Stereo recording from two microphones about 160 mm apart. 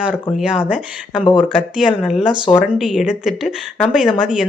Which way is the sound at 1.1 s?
30° left (ahead or behind).